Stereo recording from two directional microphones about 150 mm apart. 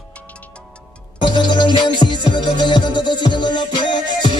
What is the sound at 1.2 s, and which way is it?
Music, 30° left (ahead or behind).